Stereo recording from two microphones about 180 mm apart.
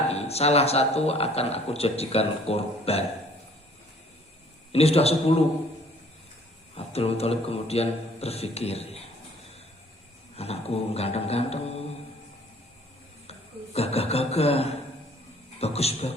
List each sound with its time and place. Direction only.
0.1 s a man's voice: 35° left (ahead or behind)
4.7 s a man's voice: 35° left (ahead or behind)
6.7 s a man's voice: 35° left (ahead or behind)
10.3 s a man's voice: 35° left (ahead or behind)
13.7 s a man's voice: 35° left (ahead or behind)